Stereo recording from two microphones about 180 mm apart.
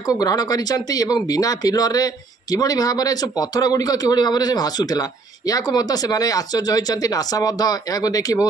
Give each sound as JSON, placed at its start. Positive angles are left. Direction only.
{"t": 0.0, "sound": "speech", "side_deg": 20}